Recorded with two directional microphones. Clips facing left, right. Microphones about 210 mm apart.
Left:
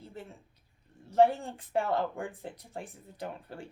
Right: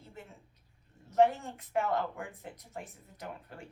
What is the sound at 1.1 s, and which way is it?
Speech, 30° left (ahead or behind).